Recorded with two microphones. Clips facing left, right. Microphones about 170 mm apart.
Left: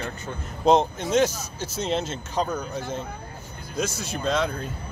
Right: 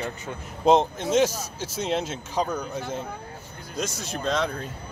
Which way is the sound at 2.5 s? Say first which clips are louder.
Even; 10° left (ahead or behind).